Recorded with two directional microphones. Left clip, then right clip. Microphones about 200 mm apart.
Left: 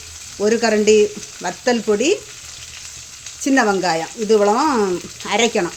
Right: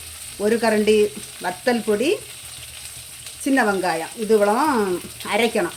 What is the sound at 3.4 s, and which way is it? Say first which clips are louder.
Speech: left 3 dB; 25° left (ahead or behind).